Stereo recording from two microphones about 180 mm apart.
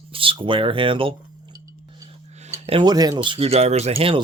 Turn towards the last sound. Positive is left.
turn(degrees=-30)  # may be behind; listen again after turning